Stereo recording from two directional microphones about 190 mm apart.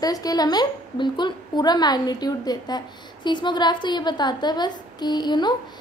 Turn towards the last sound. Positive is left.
turn(degrees=20)  # may be behind; listen again after turning